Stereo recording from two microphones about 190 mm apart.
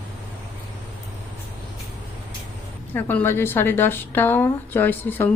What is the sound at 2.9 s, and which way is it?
A woman's voice, 10° left (ahead or behind).